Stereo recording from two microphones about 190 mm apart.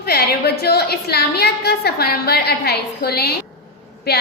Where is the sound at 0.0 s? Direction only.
55° left (ahead or behind).